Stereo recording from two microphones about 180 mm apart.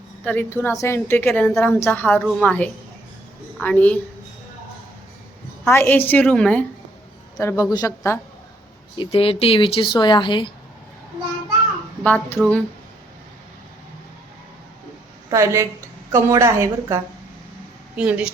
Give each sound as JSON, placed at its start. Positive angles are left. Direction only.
{"t": 0.3, "sound": "a woman's voice", "side_deg": 10}
{"t": 5.6, "sound": "a woman's voice", "side_deg": 10}
{"t": 7.3, "sound": "a woman's voice", "side_deg": 20}
{"t": 9.0, "sound": "a woman's voice", "side_deg": 30}
{"t": 12.0, "sound": "a woman's voice", "side_deg": 10}
{"t": 15.3, "sound": "a woman's voice", "side_deg": -15}